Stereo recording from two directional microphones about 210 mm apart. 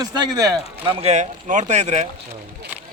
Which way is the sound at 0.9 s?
30° right (ahead or behind).